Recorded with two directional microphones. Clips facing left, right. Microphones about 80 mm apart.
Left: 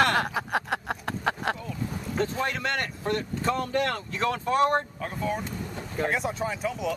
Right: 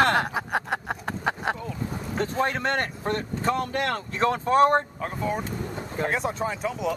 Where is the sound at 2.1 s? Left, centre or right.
Right.